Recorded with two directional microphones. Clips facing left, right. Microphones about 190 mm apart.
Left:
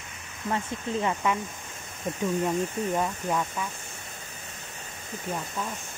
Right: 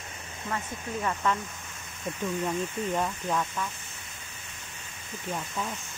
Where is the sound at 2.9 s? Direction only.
10° left (ahead or behind).